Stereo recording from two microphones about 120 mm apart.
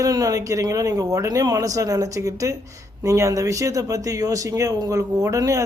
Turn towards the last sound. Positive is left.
turn(degrees=-25)  # may be behind; listen again after turning